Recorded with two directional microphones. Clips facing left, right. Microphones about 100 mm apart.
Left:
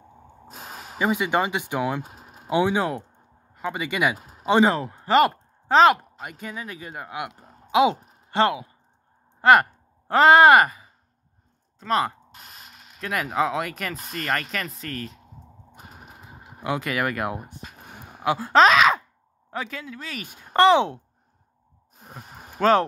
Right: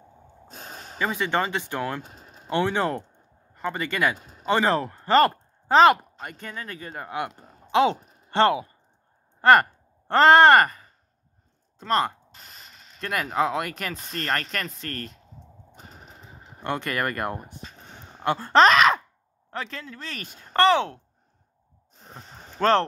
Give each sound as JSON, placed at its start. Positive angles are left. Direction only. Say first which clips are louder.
{"t": 0.5, "sound": "speech", "louder": "left 2 dB", "side_deg": 5}
{"t": 4.5, "sound": "speech", "louder": "left 3 dB", "side_deg": 15}
{"t": 11.8, "sound": "mechanisms", "louder": "even", "side_deg": 5}
{"t": 14.1, "sound": "speech", "louder": "left 1 dB", "side_deg": 0}
{"t": 15.7, "sound": "a sound", "louder": "left 2 dB", "side_deg": 5}
{"t": 19.5, "sound": "speech", "louder": "left 2 dB", "side_deg": 10}
{"t": 21.9, "sound": "a sound", "louder": "left 2 dB", "side_deg": 10}